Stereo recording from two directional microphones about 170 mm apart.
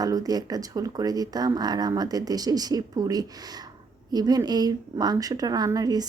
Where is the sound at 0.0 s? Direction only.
20° right (ahead or behind).